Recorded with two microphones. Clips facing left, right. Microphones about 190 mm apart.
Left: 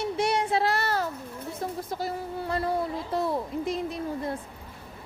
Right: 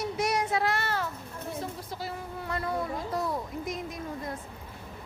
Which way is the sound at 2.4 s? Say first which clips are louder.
Left 4 dB; 30° left (ahead or behind).